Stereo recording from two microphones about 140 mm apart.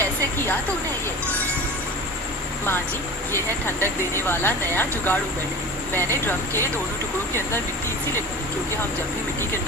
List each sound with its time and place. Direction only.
3.3 s speech: 15° left (ahead or behind)